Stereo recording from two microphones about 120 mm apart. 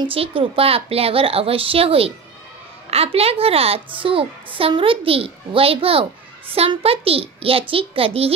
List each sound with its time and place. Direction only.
0.0 s a woman's voice: 50° right (ahead or behind)